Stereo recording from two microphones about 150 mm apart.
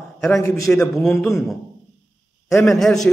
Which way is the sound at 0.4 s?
20° left (ahead or behind).